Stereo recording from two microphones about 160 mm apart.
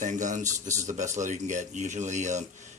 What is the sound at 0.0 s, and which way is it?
Speech, 50° right (ahead or behind).